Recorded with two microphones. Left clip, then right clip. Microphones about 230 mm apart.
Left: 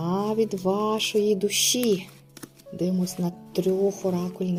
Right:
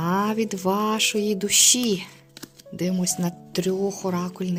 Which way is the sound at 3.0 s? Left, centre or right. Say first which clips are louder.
Right 3 dB; right.